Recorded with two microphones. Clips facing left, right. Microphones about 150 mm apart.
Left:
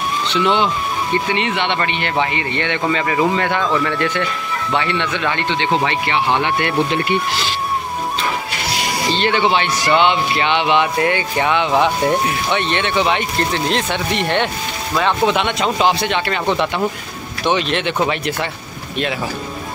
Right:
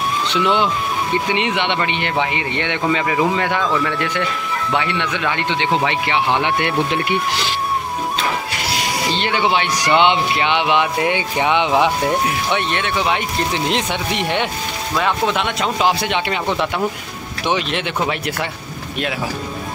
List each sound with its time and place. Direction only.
0.3 s speech: 5° right (ahead or behind)
9.1 s speech: 10° right (ahead or behind)
11.7 s speech: 5° right (ahead or behind)